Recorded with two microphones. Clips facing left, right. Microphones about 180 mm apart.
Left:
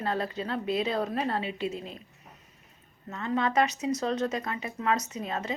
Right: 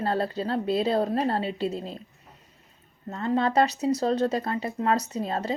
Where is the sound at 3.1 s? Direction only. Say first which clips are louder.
Right 4 dB; 35° right (ahead or behind).